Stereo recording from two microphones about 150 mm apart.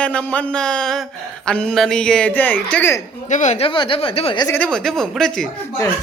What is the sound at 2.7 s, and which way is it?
Music, 15° left (ahead or behind).